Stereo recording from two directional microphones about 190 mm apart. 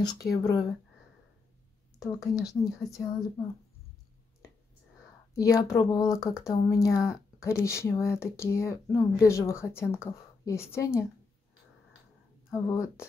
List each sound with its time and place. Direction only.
0.4 s speech: 20° left (ahead or behind)
2.4 s speech: 20° left (ahead or behind)
5.3 s speech: 20° left (ahead or behind)
12.4 s a sound: 15° left (ahead or behind)